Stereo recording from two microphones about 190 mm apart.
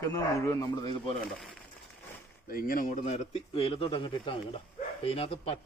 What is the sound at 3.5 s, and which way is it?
Speech, 30° left (ahead or behind).